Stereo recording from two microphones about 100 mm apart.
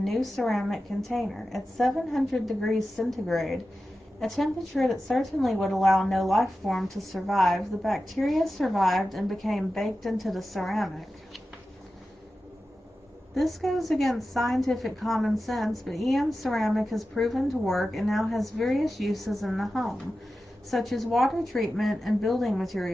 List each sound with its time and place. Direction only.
0.0 s a woman's voice: centre (ahead or behind)
13.3 s a woman's voice: centre (ahead or behind)